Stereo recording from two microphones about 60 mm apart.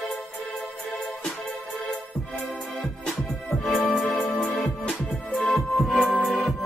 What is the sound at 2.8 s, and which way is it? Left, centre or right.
Music, centre.